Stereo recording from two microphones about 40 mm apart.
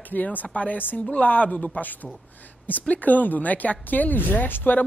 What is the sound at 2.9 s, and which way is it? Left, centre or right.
Speech, left.